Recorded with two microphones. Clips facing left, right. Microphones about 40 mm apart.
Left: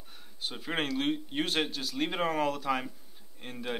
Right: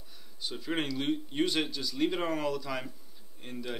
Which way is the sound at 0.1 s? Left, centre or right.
Left.